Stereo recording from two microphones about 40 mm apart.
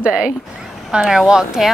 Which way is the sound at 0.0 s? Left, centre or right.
Right.